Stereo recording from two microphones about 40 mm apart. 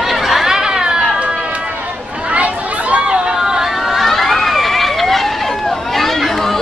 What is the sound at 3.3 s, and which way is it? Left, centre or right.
Vehicle, centre.